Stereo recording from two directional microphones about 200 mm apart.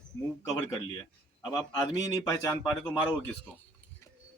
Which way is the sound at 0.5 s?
20° left (ahead or behind).